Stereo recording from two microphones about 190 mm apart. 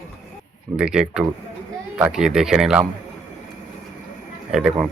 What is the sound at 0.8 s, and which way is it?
Speech, 5° right (ahead or behind).